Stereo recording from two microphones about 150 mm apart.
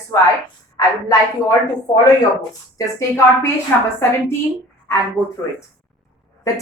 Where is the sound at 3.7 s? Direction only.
10° left (ahead or behind).